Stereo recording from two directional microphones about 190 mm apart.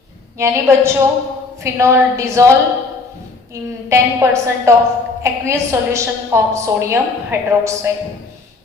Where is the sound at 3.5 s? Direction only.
15° right (ahead or behind).